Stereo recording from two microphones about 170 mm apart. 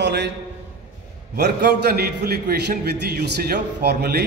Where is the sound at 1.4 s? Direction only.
75° right (ahead or behind).